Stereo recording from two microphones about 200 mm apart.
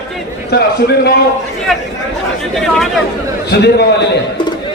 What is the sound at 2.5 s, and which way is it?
Speech, centre (ahead or behind).